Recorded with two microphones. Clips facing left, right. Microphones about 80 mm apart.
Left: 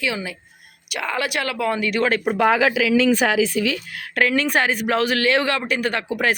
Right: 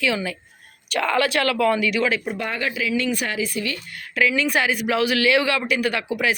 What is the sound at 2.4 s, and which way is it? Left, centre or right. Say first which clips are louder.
Speech: left 9 dB; left.